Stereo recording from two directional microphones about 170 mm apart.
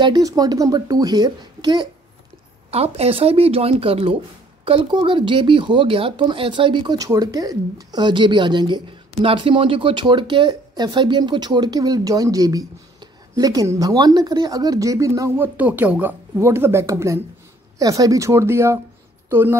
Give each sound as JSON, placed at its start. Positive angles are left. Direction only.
{"t": 0.0, "sound": "speech", "side_deg": -20}
{"t": 2.7, "sound": "speech", "side_deg": -35}
{"t": 19.2, "sound": "a sound", "side_deg": -15}